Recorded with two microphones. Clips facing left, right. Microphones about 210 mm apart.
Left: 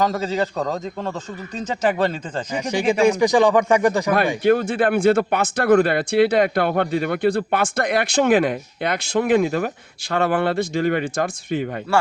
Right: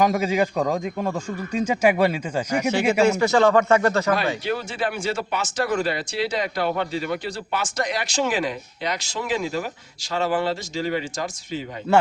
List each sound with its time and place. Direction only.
0.0 s a man's voice: 15° right (ahead or behind)
3.0 s speech: 15° left (ahead or behind)
4.4 s speech: 55° left (ahead or behind)